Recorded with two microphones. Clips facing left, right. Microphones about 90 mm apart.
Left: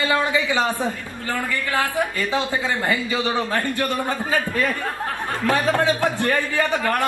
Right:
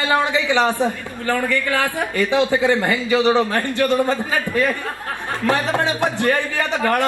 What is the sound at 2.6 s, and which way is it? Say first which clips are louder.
A man's voice: right 5 dB; 20° right (ahead or behind).